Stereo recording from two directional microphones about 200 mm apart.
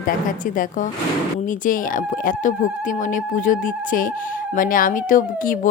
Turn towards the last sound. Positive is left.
turn(degrees=45)  # may be behind; listen again after turning